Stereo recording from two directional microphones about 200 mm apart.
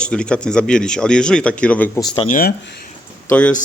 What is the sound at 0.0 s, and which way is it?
Speech, 5° left (ahead or behind).